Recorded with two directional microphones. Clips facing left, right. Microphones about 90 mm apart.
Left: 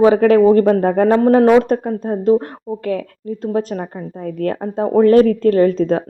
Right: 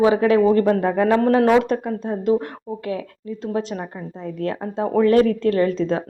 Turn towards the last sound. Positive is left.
turn(degrees=45)  # may be behind; listen again after turning